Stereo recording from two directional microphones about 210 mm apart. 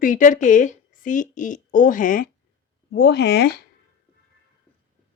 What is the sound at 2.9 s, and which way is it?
Speech, 50° left (ahead or behind).